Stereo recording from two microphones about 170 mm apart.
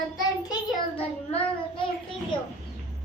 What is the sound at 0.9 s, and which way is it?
Child singing, 35° left (ahead or behind).